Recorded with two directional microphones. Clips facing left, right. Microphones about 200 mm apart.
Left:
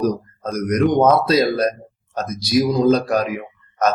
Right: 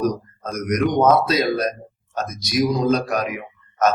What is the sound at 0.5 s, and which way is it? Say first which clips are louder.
Speech: left 3 dB; 30° left (ahead or behind).